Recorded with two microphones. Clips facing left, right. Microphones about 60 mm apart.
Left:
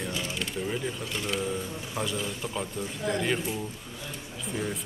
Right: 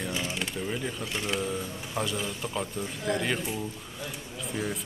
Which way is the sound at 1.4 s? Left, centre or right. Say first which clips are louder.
Left 1 dB; centre.